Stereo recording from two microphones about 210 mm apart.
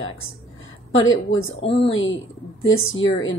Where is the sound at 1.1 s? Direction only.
70° left (ahead or behind).